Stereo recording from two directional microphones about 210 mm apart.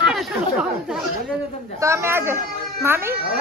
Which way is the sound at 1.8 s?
15° right (ahead or behind).